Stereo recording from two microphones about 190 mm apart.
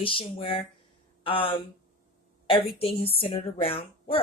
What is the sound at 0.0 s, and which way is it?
A woman's voice, 30° left (ahead or behind).